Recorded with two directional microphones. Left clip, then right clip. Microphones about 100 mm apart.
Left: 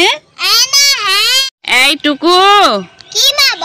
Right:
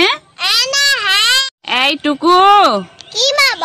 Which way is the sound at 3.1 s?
45° right (ahead or behind).